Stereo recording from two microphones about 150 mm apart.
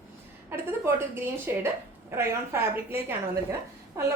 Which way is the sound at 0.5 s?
15° right (ahead or behind).